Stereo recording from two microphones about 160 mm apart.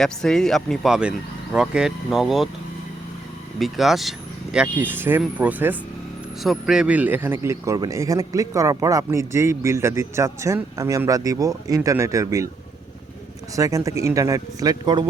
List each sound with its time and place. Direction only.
0.0 s speech: 5° left (ahead or behind)
3.6 s a man's voice: centre (ahead or behind); by 12.5 s 20° right (ahead or behind)
13.6 s a man's voice: 20° right (ahead or behind)